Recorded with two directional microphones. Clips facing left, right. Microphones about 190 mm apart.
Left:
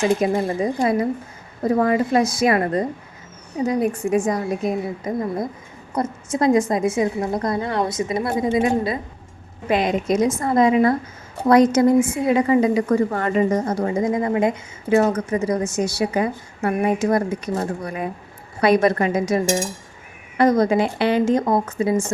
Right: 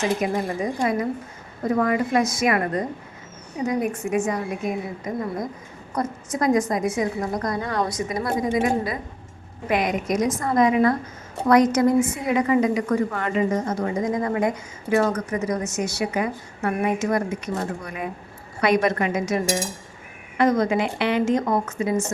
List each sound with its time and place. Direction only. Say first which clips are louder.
0.0 s a woman's voice: left 4 dB; 30° left (ahead or behind)
20.4 s a woman's voice: left 3 dB; 35° left (ahead or behind)